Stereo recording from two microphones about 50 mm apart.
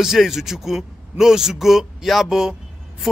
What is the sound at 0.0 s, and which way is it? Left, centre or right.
A man's voice, centre.